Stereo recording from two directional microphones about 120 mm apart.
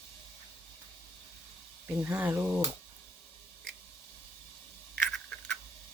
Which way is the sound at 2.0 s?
15° right (ahead or behind).